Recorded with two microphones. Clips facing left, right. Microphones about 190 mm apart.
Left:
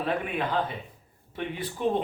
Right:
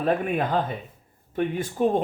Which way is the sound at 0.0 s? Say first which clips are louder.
Right 5 dB; 45° right (ahead or behind).